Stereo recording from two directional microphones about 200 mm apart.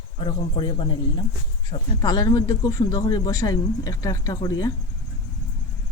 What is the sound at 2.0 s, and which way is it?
Speech, 20° left (ahead or behind).